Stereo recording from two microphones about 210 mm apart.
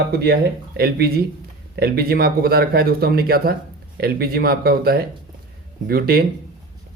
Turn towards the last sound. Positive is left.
turn(degrees=-45)  # may be behind; listen again after turning